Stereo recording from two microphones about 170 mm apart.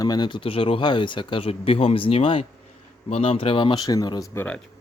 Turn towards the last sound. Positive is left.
turn(degrees=20)  # may be behind; listen again after turning